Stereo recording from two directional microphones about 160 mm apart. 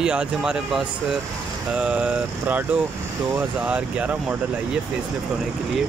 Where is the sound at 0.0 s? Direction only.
5° right (ahead or behind).